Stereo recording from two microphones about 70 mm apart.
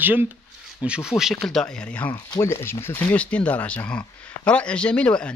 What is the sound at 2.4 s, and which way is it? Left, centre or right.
Speech, left.